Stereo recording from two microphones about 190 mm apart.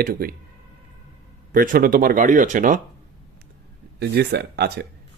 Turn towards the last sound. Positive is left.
turn(degrees=-60)  # may be behind; listen again after turning